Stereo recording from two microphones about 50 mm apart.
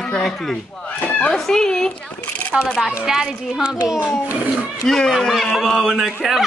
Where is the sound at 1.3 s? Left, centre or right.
Centre.